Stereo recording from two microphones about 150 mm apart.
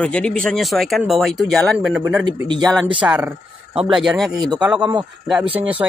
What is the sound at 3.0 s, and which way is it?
Speech, 10° right (ahead or behind).